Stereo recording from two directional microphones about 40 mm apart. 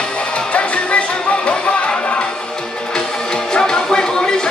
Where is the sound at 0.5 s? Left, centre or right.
Left.